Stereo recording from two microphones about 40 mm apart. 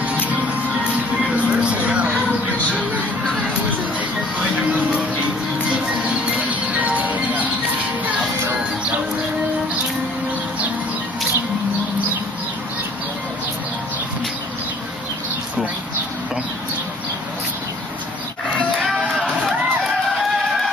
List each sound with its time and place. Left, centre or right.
1.2 s music: right
6.3 s music: right
18.8 s music: centre